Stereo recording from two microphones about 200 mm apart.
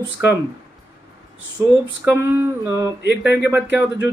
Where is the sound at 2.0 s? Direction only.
10° right (ahead or behind).